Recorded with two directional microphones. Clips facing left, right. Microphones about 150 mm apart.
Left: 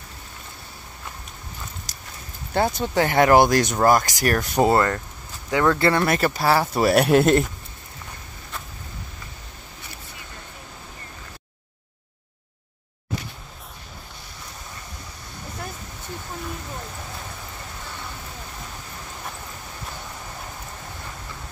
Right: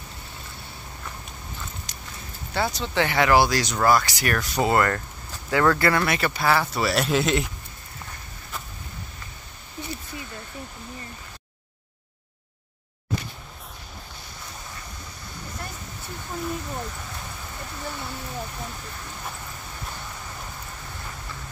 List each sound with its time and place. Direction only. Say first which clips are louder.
1.9 s horse: right 1 dB; 40° left (ahead or behind)
2.5 s speech: left 4 dB; 50° left (ahead or behind)
4.7 s speech: left 1 dB; 20° left (ahead or behind)
6.0 s speech: left 3 dB; 40° left (ahead or behind)